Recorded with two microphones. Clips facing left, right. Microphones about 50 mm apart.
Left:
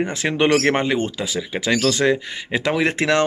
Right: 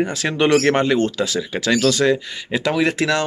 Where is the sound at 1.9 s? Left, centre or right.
Left.